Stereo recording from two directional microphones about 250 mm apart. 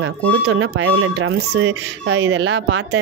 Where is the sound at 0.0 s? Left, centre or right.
Right.